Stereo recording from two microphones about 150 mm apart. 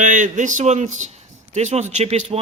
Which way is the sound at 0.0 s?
55° right (ahead or behind).